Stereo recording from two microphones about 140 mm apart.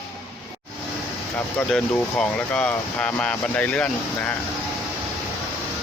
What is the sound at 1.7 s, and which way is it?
Speech, 5° left (ahead or behind).